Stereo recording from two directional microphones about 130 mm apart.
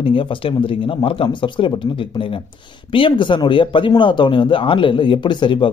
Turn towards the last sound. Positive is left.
turn(degrees=40)  # may be behind; listen again after turning